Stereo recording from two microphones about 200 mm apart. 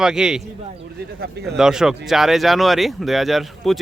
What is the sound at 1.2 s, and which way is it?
Speech, 55° right (ahead or behind).